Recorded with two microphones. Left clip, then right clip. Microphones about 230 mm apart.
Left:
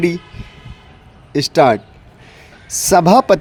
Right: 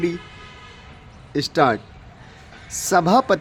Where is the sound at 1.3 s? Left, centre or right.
Left.